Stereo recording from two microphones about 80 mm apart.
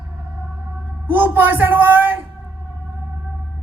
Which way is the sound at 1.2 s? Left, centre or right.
Right.